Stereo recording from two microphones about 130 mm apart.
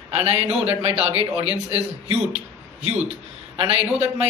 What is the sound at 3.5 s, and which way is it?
Speech, 50° right (ahead or behind).